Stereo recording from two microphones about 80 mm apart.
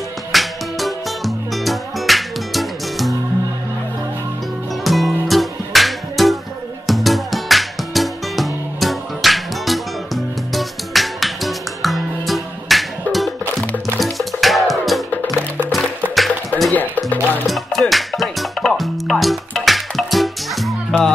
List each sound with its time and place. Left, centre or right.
0.3 s music: centre
4.8 s music: centre
16.7 s music: left
17.5 s music: centre